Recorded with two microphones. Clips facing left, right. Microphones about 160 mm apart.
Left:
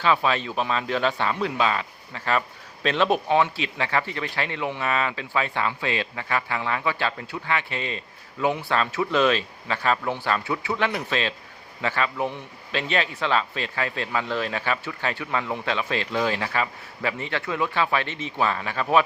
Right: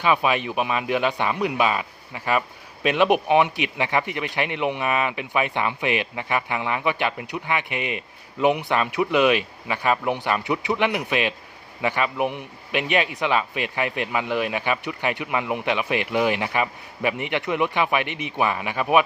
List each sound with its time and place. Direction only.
0.0 s speech: 15° right (ahead or behind)